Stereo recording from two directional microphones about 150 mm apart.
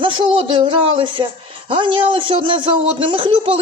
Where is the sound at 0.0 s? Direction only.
35° right (ahead or behind).